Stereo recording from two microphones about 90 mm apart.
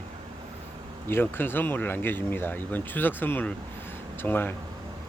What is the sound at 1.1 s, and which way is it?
Speech, 25° left (ahead or behind).